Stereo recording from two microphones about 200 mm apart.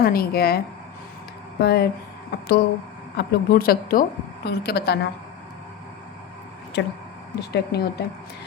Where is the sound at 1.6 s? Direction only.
55° left (ahead or behind).